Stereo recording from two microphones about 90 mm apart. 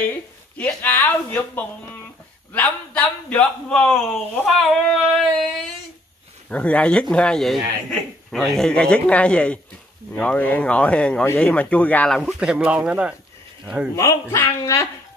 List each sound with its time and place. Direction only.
0.7 s a man's voice: 20° left (ahead or behind)
4.5 s a sound: centre (ahead or behind)
6.5 s a man's voice: 15° left (ahead or behind)
12.1 s a sound: 5° left (ahead or behind)
12.4 s speech: 10° right (ahead or behind)
13.9 s speech: 35° left (ahead or behind)